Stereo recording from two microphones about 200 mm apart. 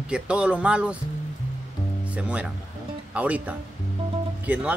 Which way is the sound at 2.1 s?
5° right (ahead or behind).